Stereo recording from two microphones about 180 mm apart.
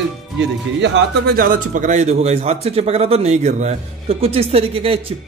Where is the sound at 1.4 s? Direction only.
50° right (ahead or behind); by 5.0 s 30° right (ahead or behind).